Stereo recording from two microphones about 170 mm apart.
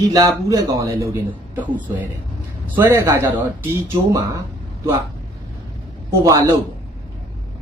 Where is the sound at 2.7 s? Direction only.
15° right (ahead or behind).